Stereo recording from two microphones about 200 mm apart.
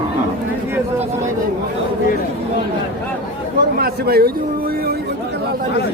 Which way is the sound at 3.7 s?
50° right (ahead or behind).